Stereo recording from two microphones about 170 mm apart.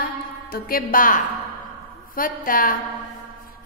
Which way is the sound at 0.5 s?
60° left (ahead or behind).